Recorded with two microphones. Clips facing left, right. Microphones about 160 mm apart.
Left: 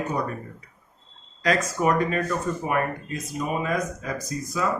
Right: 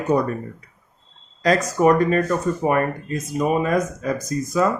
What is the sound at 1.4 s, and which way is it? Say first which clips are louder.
Speech: right 6 dB; 40° right (ahead or behind).